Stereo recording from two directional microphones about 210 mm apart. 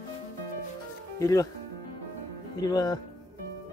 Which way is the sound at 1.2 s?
15° left (ahead or behind).